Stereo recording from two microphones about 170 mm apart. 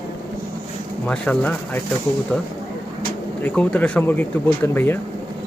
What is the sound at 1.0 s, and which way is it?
Speech, 5° left (ahead or behind).